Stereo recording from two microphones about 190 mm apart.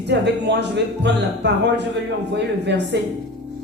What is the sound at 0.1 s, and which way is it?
Speech, 65° right (ahead or behind).